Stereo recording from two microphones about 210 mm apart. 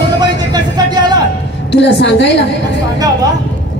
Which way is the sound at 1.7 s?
55° left (ahead or behind).